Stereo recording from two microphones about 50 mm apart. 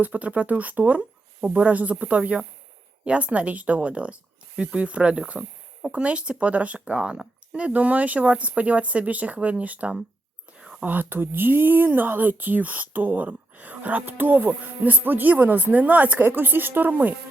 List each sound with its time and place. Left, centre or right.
0.0 s speech: right
5.3 s a sound: centre
5.9 s speech: right
10.6 s whispering: centre
10.8 s speech: right